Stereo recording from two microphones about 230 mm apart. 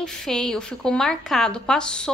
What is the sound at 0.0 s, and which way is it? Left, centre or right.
A woman's voice, centre.